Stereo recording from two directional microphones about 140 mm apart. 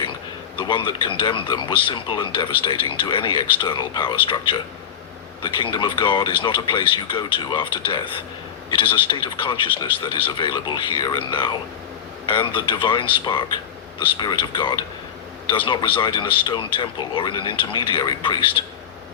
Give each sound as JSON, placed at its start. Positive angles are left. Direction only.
{"t": 0.5, "sound": "speech", "side_deg": 35}